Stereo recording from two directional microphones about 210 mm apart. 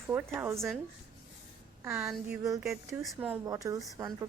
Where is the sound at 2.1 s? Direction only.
Centre (ahead or behind).